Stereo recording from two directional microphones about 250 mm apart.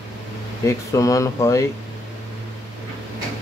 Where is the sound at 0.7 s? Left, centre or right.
Centre.